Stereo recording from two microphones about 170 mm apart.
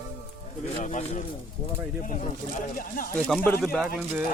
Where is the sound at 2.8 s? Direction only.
55° left (ahead or behind).